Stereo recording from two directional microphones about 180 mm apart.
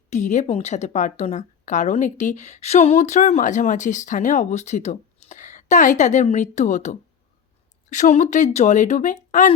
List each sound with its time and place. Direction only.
0.1 s a woman's voice: 40° left (ahead or behind)